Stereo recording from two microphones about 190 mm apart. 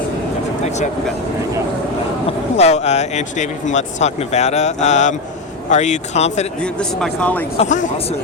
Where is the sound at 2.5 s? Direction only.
35° left (ahead or behind).